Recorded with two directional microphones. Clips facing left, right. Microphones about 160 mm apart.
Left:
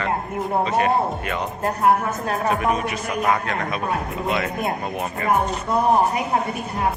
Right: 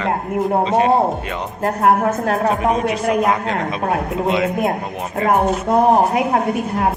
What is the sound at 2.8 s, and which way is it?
Speech, 90° right.